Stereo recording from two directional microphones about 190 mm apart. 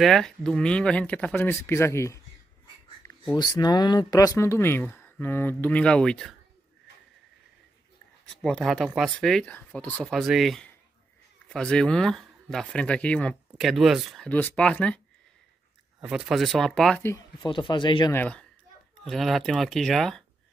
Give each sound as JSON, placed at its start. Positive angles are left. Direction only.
{"t": 0.0, "sound": "speech", "side_deg": 0}
{"t": 8.4, "sound": "speech", "side_deg": 0}
{"t": 16.0, "sound": "speech", "side_deg": -5}
{"t": 17.4, "sound": "speech", "side_deg": 25}
{"t": 18.1, "sound": "a child's voice", "side_deg": 5}